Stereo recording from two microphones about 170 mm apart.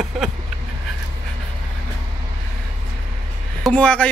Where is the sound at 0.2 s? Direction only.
Centre (ahead or behind).